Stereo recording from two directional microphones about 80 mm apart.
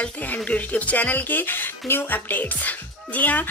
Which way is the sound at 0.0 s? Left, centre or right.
Centre.